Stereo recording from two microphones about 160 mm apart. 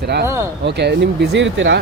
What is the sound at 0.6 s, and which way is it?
Speech, 90° right.